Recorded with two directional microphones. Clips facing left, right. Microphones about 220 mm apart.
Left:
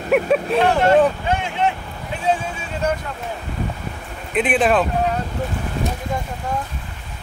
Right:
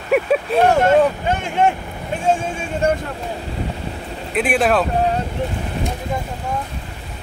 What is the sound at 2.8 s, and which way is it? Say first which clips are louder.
Speech: right 4 dB; 50° right (ahead or behind).